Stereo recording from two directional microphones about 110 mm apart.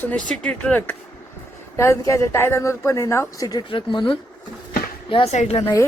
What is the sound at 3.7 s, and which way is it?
Speech, 45° left (ahead or behind).